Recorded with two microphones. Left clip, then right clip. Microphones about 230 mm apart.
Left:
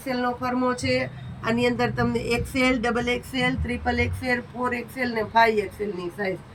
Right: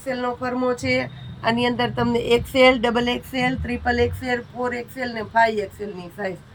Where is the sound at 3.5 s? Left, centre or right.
Centre.